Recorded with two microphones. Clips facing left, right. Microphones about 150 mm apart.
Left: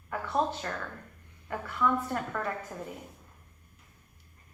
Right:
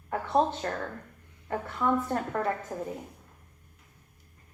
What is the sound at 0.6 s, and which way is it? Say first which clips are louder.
A woman's voice: right 4 dB; 35° right (ahead or behind).